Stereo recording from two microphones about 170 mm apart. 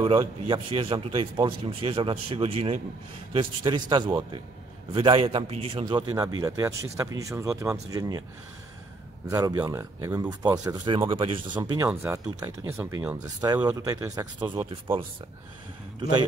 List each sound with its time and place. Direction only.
0.5 s a man's voice: 30° right (ahead or behind)
9.3 s a man's voice: 20° right (ahead or behind)